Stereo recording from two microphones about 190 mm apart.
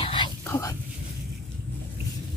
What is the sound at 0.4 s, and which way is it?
Speech, 15° left (ahead or behind).